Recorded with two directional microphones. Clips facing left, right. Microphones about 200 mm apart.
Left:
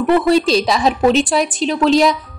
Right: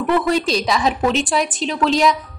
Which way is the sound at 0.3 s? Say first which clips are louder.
Left 5 dB; 30° left (ahead or behind).